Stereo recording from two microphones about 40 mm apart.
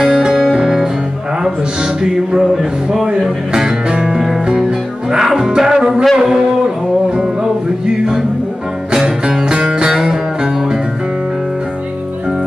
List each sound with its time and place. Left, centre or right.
0.0 s music: centre
2.5 s speech: centre
3.1 s music: centre
6.1 s a sound: centre
9.3 s music: right